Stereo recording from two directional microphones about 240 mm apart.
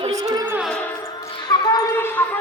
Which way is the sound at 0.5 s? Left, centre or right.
Centre.